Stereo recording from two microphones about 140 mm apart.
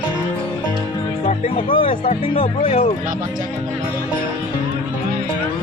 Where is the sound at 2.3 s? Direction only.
65° left (ahead or behind).